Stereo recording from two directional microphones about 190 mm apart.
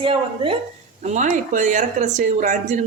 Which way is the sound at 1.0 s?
40° right (ahead or behind).